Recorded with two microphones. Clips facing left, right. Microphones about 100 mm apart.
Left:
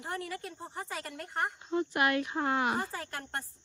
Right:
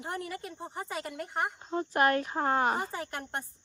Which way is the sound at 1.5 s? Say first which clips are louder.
Right 2 dB; 35° right (ahead or behind).